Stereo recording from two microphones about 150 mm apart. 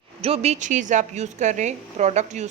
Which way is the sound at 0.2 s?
45° right (ahead or behind).